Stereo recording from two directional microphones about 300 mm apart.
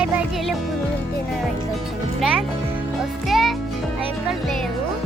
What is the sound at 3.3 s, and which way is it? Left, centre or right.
Music, centre.